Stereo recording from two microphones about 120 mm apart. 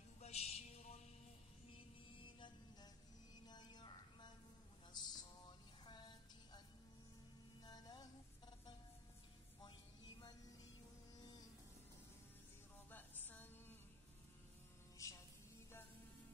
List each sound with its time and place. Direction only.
0.2 s music: 60° left (ahead or behind)
2.2 s music: 40° left (ahead or behind)
4.9 s a sound: 35° left (ahead or behind)
7.6 s music: 30° left (ahead or behind)
9.6 s a sound: 40° left (ahead or behind)
12.9 s music: 15° left (ahead or behind)
15.0 s music: 25° left (ahead or behind)